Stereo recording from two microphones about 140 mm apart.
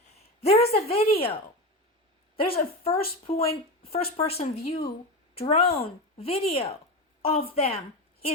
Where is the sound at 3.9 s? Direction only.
50° left (ahead or behind).